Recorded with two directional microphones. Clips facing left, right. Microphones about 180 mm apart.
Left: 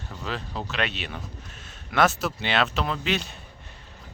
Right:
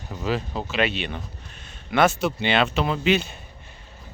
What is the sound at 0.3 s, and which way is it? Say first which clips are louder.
Speech: right 6 dB; 5° right (ahead or behind).